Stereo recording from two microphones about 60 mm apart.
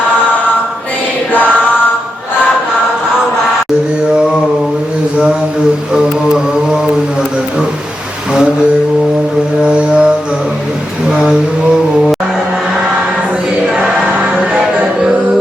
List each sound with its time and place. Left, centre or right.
9.6 s music: centre
13.7 s music: centre